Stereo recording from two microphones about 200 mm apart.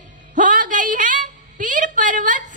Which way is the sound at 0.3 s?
40° right (ahead or behind).